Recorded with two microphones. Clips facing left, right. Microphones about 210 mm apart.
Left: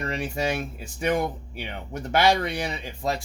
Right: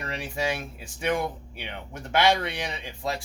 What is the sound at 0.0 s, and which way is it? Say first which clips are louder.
Speech: left 3 dB; 45° left (ahead or behind).